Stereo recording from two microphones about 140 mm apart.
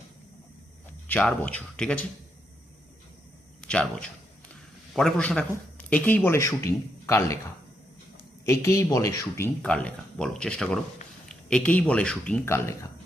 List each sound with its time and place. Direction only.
1.0 s speech: 15° left (ahead or behind)
3.6 s speech: 5° left (ahead or behind)
8.4 s speech: 20° left (ahead or behind)
9.6 s speech: 5° left (ahead or behind)
12.5 s speech: 20° left (ahead or behind)